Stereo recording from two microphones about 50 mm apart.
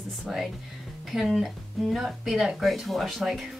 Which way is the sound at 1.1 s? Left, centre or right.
Centre.